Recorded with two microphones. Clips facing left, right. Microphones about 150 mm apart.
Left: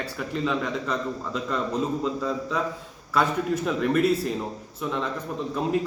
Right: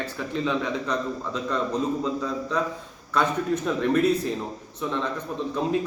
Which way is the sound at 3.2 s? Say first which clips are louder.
Even; 5° left (ahead or behind).